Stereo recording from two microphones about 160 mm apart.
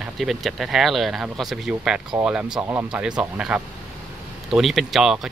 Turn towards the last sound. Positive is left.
turn(degrees=0)  # may be behind; listen again after turning